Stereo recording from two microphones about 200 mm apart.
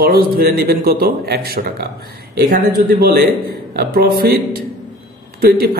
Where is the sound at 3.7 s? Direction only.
50° right (ahead or behind).